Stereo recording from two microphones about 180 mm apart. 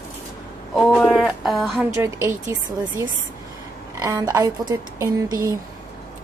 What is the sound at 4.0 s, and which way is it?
A woman's voice, 20° right (ahead or behind).